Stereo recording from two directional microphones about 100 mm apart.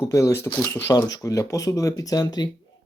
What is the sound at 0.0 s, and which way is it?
Speech, 30° left (ahead or behind).